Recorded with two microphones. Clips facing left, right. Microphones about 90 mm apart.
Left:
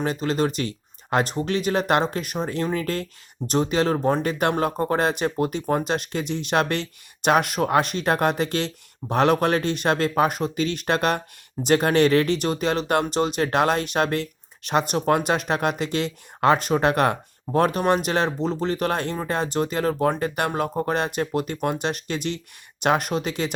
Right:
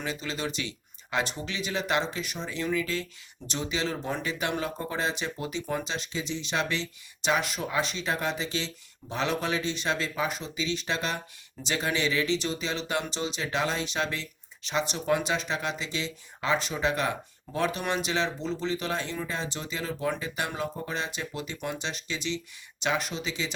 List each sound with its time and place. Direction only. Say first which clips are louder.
0.0 s speech: left 10 dB; 50° left (ahead or behind)